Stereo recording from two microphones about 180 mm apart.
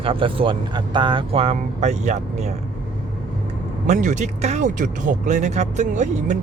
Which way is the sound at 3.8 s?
40° right (ahead or behind).